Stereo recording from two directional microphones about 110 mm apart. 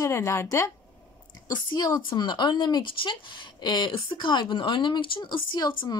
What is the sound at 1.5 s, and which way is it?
A woman's voice, 35° left (ahead or behind).